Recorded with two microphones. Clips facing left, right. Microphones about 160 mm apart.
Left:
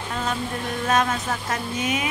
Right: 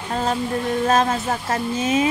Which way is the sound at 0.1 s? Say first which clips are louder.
Right 5 dB; 35° right (ahead or behind).